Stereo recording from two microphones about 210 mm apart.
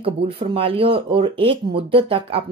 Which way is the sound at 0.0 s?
25° right (ahead or behind).